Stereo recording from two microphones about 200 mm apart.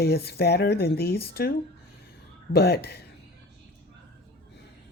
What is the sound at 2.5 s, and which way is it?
Speech, 55° left (ahead or behind).